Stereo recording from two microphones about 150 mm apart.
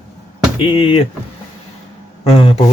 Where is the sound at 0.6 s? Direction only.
40° left (ahead or behind).